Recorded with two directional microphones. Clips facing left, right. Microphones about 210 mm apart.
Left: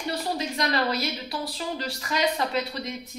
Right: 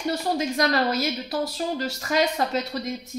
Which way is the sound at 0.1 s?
45° right (ahead or behind).